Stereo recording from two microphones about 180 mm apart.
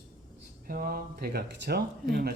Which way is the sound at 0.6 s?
50° right (ahead or behind).